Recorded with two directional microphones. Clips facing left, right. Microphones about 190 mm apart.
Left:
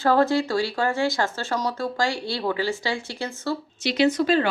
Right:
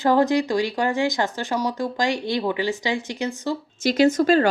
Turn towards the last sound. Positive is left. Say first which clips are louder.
# right 3 dB
turn(degrees=-45)  # may be behind; listen again after turning